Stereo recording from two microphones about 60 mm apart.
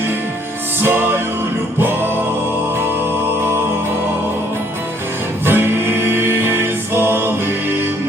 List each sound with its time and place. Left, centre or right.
0.8 s music: right
5.5 s music: right